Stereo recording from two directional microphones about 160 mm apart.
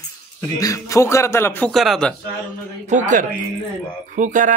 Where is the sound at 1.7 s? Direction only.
Centre (ahead or behind).